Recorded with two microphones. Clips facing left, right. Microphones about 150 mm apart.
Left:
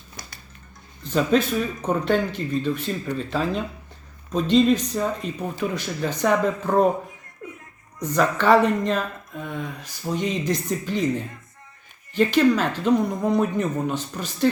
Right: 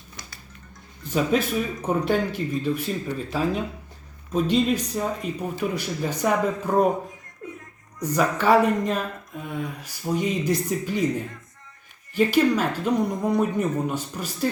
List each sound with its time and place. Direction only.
1.0 s speech: 10° right (ahead or behind)
8.0 s speech: 10° right (ahead or behind)
12.1 s speech: 10° right (ahead or behind)